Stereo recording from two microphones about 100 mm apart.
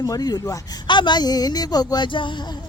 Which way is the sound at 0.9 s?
50° left (ahead or behind).